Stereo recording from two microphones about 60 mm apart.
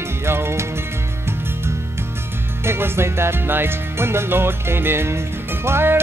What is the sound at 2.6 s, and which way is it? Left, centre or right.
Music, right.